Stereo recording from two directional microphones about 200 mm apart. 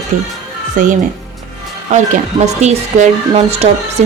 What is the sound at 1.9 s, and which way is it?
Speech, 35° right (ahead or behind).